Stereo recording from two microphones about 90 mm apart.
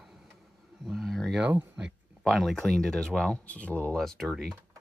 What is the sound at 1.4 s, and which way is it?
Speech, 15° right (ahead or behind).